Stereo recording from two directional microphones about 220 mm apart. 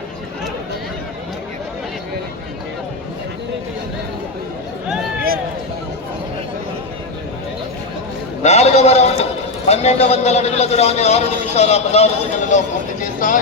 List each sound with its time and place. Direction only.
8.4 s a man's voice: 30° left (ahead or behind)